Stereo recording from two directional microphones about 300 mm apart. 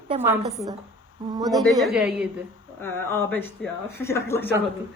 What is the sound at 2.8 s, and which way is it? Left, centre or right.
A woman's voice, centre.